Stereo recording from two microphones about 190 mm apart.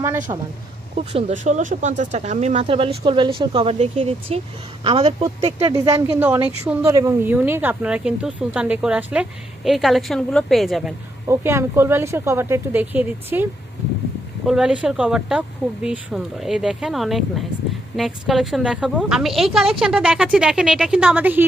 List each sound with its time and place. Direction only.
0.0 s speech: 15° right (ahead or behind)
1.1 s speech: 40° right (ahead or behind)
5.6 s speech: 15° right (ahead or behind); by 10.9 s centre (ahead or behind)
11.3 s speech: 15° right (ahead or behind)